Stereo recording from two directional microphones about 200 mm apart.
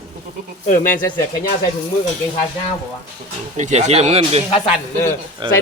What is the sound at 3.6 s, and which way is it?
A woman's voice, 35° right (ahead or behind).